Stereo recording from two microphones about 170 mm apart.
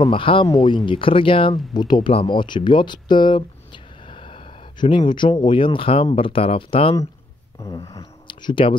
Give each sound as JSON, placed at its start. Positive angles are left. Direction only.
{"t": 0.0, "sound": "speech", "side_deg": 30}
{"t": 7.6, "sound": "speech", "side_deg": 20}